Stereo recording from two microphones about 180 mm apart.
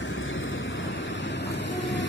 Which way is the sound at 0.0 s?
90° left.